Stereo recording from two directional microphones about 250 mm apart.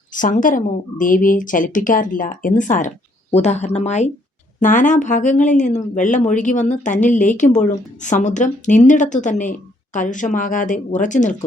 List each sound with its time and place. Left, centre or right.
0.1 s speech: left